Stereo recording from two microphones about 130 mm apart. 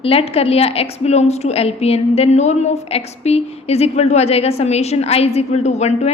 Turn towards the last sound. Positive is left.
turn(degrees=60)  # may be behind; listen again after turning